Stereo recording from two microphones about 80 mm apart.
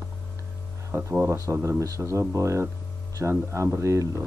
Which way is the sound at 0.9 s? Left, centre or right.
Right.